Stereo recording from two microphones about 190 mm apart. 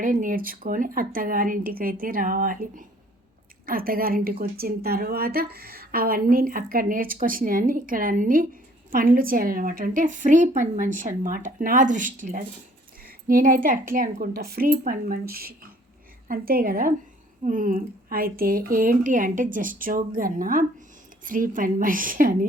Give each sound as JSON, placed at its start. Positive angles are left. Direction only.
{"t": 0.0, "sound": "a woman's voice", "side_deg": -45}